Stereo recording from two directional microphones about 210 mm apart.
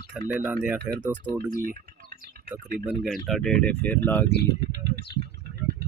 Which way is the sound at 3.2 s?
Centre (ahead or behind).